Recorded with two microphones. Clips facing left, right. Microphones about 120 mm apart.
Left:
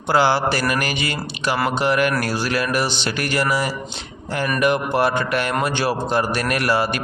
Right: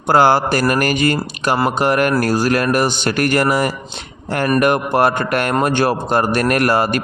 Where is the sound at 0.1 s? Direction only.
50° right (ahead or behind).